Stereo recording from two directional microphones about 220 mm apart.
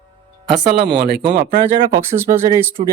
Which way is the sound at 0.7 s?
45° right (ahead or behind).